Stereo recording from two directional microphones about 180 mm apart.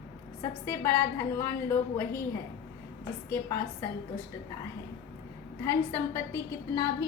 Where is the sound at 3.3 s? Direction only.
15° left (ahead or behind).